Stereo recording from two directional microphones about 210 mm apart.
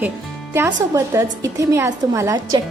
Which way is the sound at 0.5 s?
15° right (ahead or behind).